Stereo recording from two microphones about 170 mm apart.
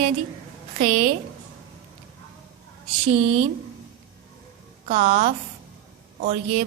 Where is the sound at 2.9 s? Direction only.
35° right (ahead or behind).